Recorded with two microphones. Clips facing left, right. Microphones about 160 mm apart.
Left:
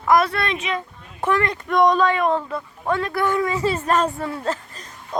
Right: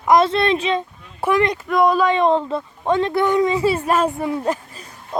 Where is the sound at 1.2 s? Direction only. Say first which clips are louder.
Right 3 dB; 15° right (ahead or behind).